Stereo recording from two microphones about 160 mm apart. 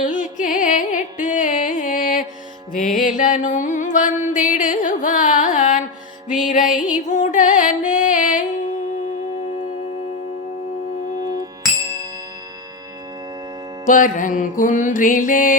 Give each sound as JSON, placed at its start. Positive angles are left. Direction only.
{"t": 0.0, "sound": "music", "side_deg": 55}
{"t": 13.8, "sound": "music", "side_deg": 55}